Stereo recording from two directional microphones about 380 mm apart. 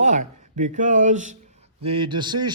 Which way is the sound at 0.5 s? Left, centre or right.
Centre.